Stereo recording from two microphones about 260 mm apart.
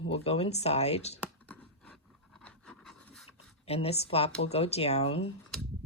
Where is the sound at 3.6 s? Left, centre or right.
Left.